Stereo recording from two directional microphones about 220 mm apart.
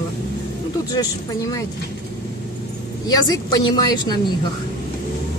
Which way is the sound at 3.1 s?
15° left (ahead or behind).